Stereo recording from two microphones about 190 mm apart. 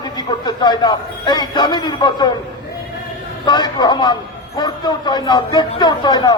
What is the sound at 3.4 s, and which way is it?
A man's voice, 20° left (ahead or behind).